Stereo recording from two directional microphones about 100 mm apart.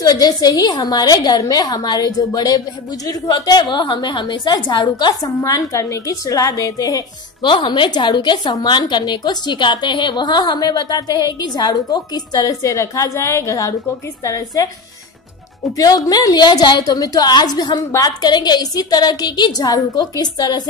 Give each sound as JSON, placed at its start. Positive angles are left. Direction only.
{"t": 0.0, "sound": "a woman's voice", "side_deg": 40}
{"t": 5.4, "sound": "a woman's voice", "side_deg": 35}
{"t": 7.4, "sound": "a woman's voice", "side_deg": 55}
{"t": 15.7, "sound": "a woman's voice", "side_deg": 40}